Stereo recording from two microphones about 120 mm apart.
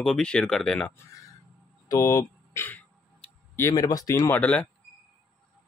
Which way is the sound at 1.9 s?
25° left (ahead or behind).